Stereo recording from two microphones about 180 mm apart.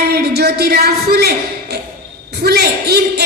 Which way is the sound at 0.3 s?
65° right (ahead or behind).